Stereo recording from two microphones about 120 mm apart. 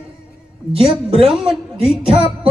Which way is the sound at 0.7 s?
55° right (ahead or behind).